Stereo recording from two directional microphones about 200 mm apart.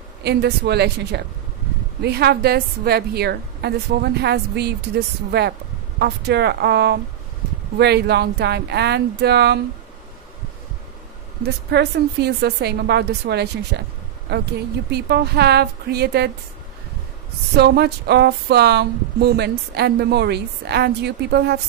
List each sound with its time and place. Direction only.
0.2 s a woman's voice: 55° right (ahead or behind)
5.9 s speech: 55° right (ahead or behind)
11.4 s speech: 55° right (ahead or behind)
14.9 s a woman's voice: 55° right (ahead or behind)
17.6 s speech: 55° right (ahead or behind)